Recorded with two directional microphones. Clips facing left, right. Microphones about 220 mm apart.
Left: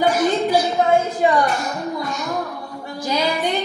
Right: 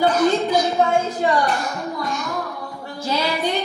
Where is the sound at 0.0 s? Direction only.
10° left (ahead or behind).